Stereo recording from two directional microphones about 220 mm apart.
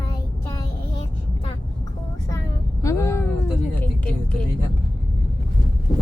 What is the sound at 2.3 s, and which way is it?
Vehicle, 15° left (ahead or behind).